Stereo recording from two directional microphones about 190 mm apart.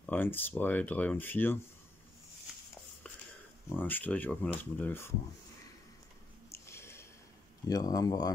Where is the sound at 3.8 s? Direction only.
10° left (ahead or behind).